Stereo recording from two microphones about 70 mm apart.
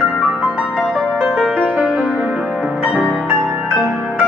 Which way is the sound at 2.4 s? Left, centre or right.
Centre.